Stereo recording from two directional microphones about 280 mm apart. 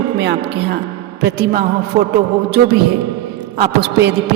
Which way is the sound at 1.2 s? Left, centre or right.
Right.